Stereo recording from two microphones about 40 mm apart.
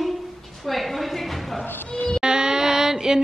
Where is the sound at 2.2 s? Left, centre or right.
Centre.